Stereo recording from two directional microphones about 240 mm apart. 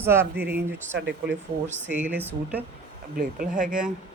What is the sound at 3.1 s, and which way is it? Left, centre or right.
Speech, right.